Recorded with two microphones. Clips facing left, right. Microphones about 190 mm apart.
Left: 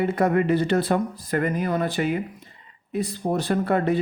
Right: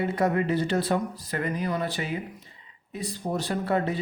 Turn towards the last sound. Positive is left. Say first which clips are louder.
# left 5 dB
turn(degrees=55)  # may be behind; listen again after turning